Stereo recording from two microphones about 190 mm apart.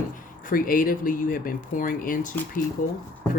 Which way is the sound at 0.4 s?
45° left (ahead or behind).